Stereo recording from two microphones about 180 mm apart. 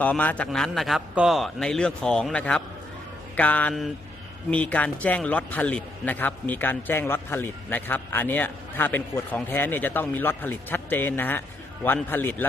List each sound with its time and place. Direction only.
0.0 s a man's voice: 10° left (ahead or behind)